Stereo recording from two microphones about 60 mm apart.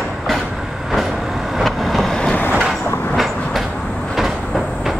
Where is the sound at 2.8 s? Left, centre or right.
Left.